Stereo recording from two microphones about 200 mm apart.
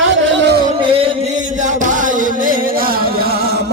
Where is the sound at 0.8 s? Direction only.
25° right (ahead or behind).